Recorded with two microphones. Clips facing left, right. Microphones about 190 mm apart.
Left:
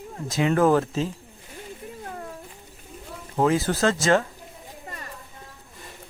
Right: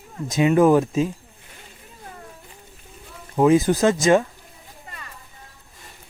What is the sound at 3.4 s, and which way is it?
Speech, 15° right (ahead or behind).